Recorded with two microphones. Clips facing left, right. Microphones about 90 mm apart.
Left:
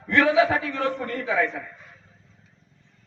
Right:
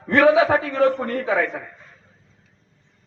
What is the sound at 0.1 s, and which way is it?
A man's voice, 40° right (ahead or behind).